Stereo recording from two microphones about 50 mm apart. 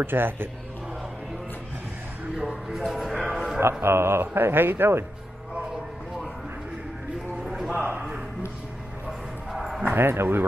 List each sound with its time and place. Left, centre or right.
0.0 s speech: right
2.3 s music: centre
2.9 s a sound: centre
3.8 s speech: right
7.4 s a sound: centre
9.5 s bow-wow: centre
9.8 s speech: right